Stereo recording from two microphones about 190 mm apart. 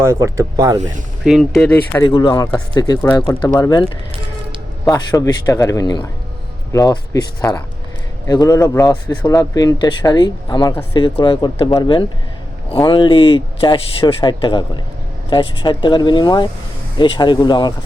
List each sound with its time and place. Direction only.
0.0 s speech: 15° right (ahead or behind)
1.2 s speech: centre (ahead or behind)
2.0 s speech: 25° left (ahead or behind)
4.9 s speech: 15° left (ahead or behind)
8.3 s speech: 20° left (ahead or behind)